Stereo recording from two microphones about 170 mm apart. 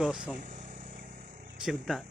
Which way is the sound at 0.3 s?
45° right (ahead or behind).